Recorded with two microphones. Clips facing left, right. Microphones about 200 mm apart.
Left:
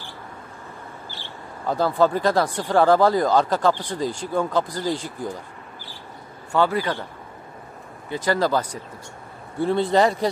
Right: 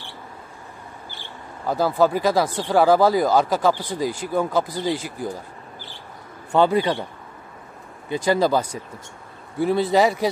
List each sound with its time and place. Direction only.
1.7 s speech: 5° right (ahead or behind)
6.5 s a man's voice: 20° right (ahead or behind)
8.1 s speech: 15° right (ahead or behind)